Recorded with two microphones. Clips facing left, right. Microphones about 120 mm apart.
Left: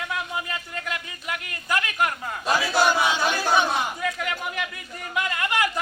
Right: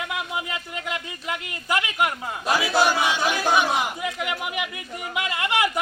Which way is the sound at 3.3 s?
10° right (ahead or behind).